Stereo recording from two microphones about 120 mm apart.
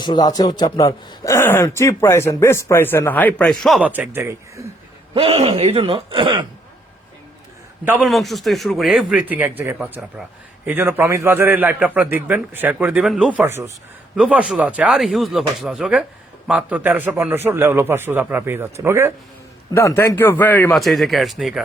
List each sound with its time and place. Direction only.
0.0 s a man's voice: 35° left (ahead or behind); by 3.8 s centre (ahead or behind)
3.8 s a man's voice: 15° right (ahead or behind)
5.1 s speech: 50° right (ahead or behind)
8.0 s a man's voice: centre (ahead or behind)
13.4 s a man's voice: 20° right (ahead or behind)
19.7 s a man's voice: 25° left (ahead or behind)
20.7 s a man's voice: centre (ahead or behind)